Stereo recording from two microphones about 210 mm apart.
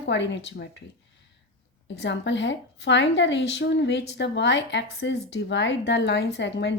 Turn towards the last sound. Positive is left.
turn(degrees=55)  # may be behind; listen again after turning